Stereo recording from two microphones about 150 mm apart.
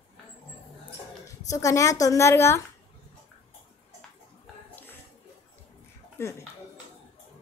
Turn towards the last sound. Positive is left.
turn(degrees=15)  # may be behind; listen again after turning